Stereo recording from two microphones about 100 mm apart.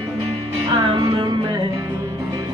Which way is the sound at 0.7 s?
50° right (ahead or behind).